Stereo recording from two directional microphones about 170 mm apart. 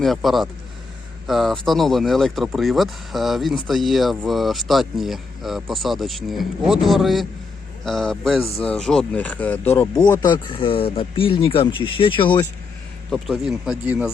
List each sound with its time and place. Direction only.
0.0 s speech: centre (ahead or behind)
10.2 s speech: 25° left (ahead or behind)
13.1 s speech: centre (ahead or behind)